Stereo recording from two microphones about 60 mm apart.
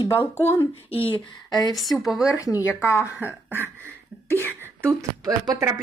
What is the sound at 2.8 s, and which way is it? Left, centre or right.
Speech, left.